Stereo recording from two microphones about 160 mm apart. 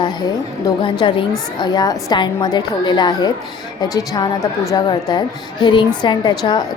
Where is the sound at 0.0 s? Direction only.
25° left (ahead or behind).